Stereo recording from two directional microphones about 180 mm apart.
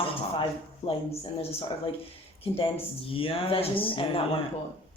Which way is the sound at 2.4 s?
30° left (ahead or behind).